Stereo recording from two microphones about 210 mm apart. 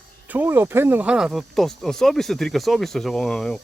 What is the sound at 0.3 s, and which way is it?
Speech, 10° right (ahead or behind).